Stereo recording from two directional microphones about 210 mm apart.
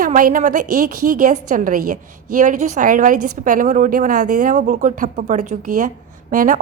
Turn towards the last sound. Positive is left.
turn(degrees=-40)  # may be behind; listen again after turning